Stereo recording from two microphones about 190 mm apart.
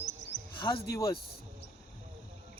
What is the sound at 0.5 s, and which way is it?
Speech, 25° left (ahead or behind).